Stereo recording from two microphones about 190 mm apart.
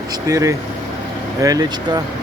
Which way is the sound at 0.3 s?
15° right (ahead or behind).